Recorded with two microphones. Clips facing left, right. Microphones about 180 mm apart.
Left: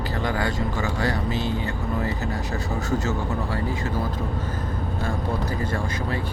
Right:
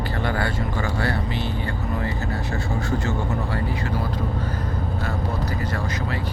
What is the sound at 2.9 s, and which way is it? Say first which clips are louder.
Speech: left 1 dB; 40° left (ahead or behind).